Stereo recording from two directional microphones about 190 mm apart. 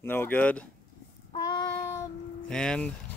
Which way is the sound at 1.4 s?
15° left (ahead or behind).